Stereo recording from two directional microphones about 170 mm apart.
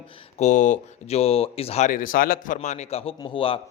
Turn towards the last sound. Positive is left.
turn(degrees=30)  # may be behind; listen again after turning